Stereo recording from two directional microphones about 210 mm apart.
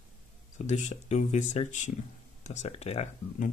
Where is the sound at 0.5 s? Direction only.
35° left (ahead or behind).